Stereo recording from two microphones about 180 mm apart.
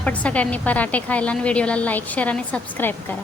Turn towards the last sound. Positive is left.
turn(degrees=10)  # may be behind; listen again after turning